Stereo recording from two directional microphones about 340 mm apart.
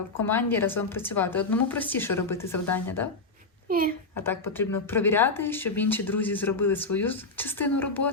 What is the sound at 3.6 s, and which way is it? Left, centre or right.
Speech, right.